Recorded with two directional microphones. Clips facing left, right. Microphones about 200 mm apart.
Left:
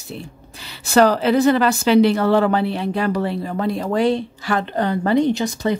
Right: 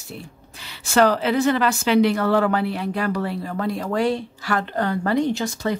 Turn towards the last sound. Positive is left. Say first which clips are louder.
# left 4 dB
turn(degrees=20)  # may be behind; listen again after turning